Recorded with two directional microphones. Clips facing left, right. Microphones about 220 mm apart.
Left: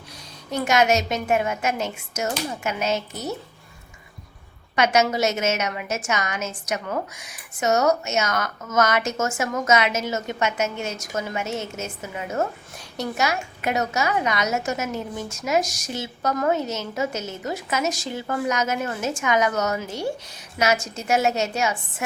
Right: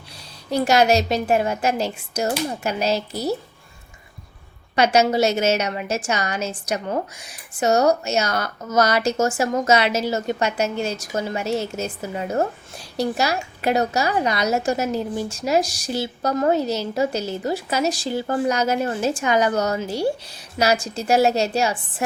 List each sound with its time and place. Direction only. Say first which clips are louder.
0.5 s a woman's voice: right 3 dB; 35° right (ahead or behind)
4.7 s a woman's voice: right 3 dB; 35° right (ahead or behind)